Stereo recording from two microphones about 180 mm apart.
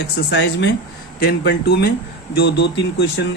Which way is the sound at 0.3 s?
75° left (ahead or behind).